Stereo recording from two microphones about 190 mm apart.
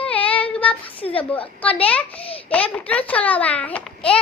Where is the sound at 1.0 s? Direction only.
30° left (ahead or behind).